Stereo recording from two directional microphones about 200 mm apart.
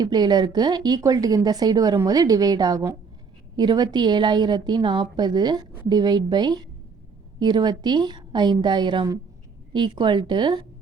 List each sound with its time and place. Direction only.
0.0 s a woman's voice: 20° right (ahead or behind)